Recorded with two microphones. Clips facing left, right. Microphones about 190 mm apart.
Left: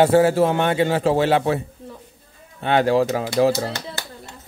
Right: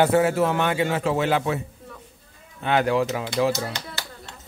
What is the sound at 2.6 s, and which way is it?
A man's voice, 30° left (ahead or behind).